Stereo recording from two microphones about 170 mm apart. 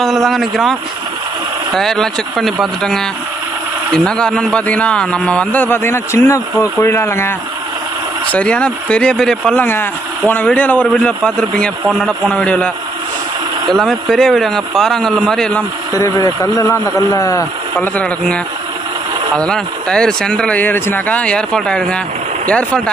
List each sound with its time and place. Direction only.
0.0 s speech: centre (ahead or behind)
1.8 s a man's voice: centre (ahead or behind)
15.9 s speech: 20° left (ahead or behind)
17.9 s a man's voice: 5° left (ahead or behind)